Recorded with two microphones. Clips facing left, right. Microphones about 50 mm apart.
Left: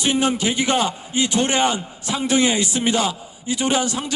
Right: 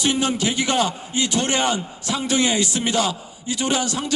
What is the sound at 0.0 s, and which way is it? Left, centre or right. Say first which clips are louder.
A man's voice: left 1 dB; left.